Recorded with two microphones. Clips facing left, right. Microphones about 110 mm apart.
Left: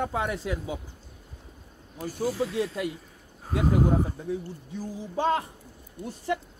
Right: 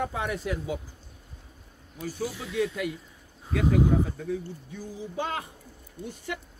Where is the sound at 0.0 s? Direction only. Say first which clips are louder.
Left 1 dB; 25° left (ahead or behind).